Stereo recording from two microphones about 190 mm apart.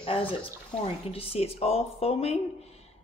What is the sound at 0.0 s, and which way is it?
Speech, 30° left (ahead or behind).